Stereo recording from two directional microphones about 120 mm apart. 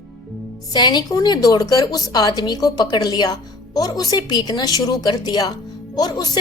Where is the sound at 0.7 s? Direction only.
35° left (ahead or behind).